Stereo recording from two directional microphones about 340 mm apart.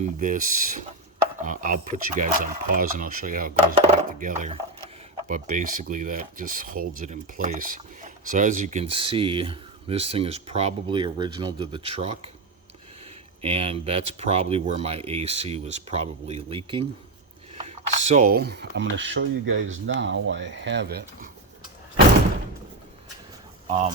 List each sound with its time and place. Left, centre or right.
0.0 s speech: right
13.4 s speech: centre
23.6 s speech: centre